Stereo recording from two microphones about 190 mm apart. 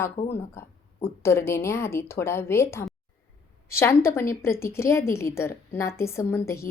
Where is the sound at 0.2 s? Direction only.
35° left (ahead or behind).